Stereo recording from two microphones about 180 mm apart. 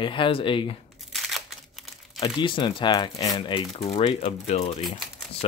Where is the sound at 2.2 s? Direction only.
25° left (ahead or behind).